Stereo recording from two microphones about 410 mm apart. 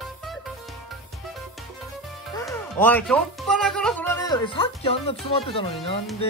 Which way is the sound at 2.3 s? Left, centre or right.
Centre.